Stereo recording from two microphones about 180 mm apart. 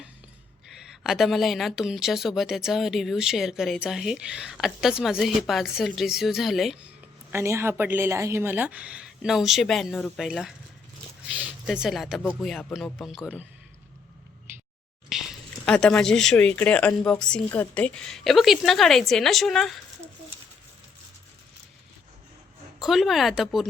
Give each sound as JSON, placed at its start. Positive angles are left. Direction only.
{"t": 1.0, "sound": "speech", "side_deg": 0}
{"t": 7.3, "sound": "a woman's voice", "side_deg": -15}
{"t": 15.1, "sound": "speech", "side_deg": 0}
{"t": 22.8, "sound": "speech", "side_deg": 0}